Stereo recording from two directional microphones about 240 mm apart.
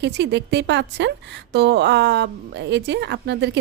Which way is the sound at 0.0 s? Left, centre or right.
Right.